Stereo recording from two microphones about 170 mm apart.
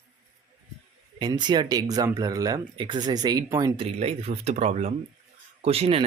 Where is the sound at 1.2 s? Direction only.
25° right (ahead or behind).